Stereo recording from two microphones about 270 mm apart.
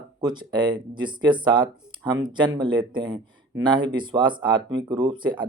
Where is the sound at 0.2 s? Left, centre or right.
Centre.